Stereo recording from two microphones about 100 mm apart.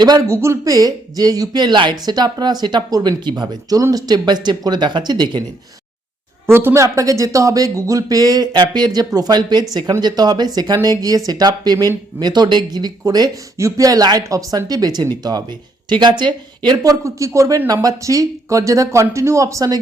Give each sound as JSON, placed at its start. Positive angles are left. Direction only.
{"t": 0.3, "sound": "speech", "side_deg": -30}
{"t": 6.5, "sound": "speech", "side_deg": -25}
{"t": 6.8, "sound": "speech", "side_deg": -35}
{"t": 13.6, "sound": "speech", "side_deg": -30}